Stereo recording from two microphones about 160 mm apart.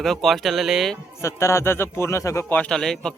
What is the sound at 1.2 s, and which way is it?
A man's voice, 15° left (ahead or behind).